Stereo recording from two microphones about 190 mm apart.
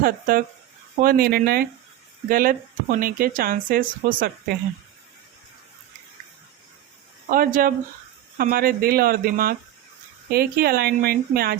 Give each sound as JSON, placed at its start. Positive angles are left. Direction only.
{"t": 0.0, "sound": "speech", "side_deg": -50}
{"t": 7.3, "sound": "speech", "side_deg": -50}